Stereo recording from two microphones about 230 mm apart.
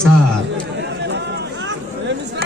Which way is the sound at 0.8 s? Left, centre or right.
Right.